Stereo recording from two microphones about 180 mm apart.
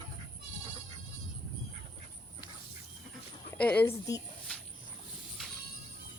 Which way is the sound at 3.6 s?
10° left (ahead or behind).